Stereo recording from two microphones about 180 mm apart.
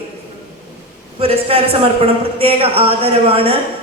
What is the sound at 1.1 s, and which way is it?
A man's voice, 30° right (ahead or behind).